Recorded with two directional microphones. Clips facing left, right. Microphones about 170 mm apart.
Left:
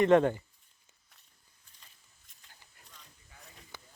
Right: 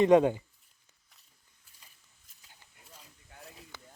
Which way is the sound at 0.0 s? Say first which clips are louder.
Right 2 dB; 15° right (ahead or behind).